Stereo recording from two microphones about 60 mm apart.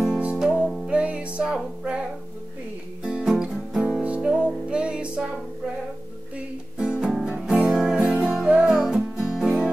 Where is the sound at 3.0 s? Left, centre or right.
Centre.